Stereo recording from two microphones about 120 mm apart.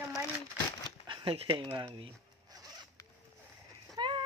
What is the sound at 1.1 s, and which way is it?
Speech, 45° right (ahead or behind).